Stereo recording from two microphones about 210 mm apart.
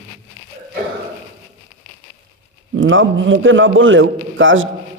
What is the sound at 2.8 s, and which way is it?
A man's voice, 65° right (ahead or behind).